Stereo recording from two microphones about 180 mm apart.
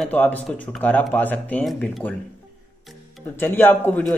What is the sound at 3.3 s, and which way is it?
Speech, 10° left (ahead or behind).